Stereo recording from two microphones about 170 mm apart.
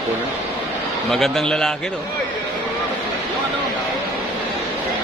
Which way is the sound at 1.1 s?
Centre (ahead or behind).